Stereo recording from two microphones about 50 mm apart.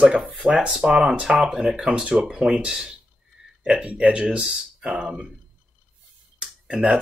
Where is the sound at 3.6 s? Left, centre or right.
Right.